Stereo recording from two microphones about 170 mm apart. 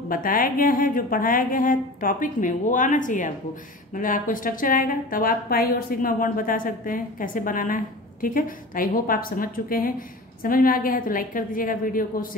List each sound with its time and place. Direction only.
0.1 s a woman's voice: 55° left (ahead or behind)